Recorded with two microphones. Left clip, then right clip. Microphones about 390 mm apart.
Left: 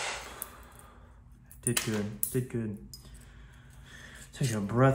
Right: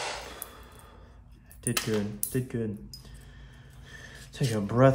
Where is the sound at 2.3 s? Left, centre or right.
Centre.